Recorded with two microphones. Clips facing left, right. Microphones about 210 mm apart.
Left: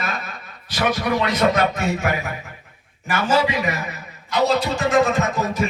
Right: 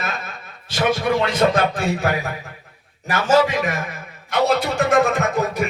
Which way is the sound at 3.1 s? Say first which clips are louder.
Right 3 dB; 45° right (ahead or behind).